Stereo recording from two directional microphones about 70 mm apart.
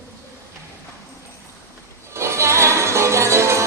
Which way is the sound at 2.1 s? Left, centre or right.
Right.